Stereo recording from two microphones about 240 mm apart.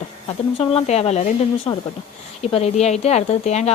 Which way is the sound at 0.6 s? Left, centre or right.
Left.